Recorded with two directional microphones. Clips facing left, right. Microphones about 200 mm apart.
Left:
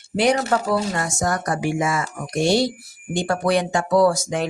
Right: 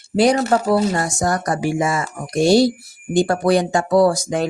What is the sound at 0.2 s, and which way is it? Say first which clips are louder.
Speech: right 4 dB; 35° right (ahead or behind).